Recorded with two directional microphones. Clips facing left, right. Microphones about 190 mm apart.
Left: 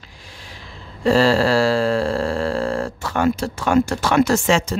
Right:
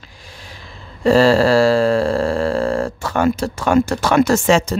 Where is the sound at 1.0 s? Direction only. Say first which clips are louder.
Right 3 dB; 45° right (ahead or behind).